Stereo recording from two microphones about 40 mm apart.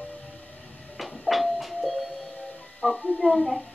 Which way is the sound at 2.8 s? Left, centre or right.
Left.